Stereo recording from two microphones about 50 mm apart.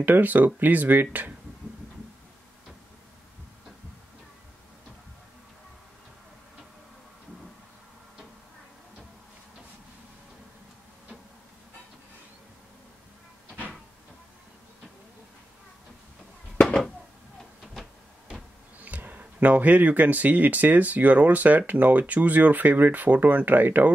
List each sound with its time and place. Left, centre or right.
0.0 s speech: right
16.6 s a sound: centre
18.8 s speech: right